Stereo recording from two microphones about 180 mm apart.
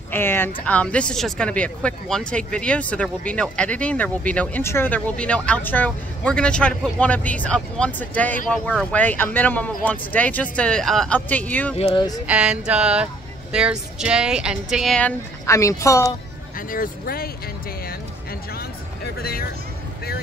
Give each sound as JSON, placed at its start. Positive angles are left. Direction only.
{"t": 0.1, "sound": "speech", "side_deg": 10}
{"t": 11.7, "sound": "speech", "side_deg": 30}
{"t": 12.3, "sound": "speech", "side_deg": -5}
{"t": 16.5, "sound": "speech", "side_deg": 50}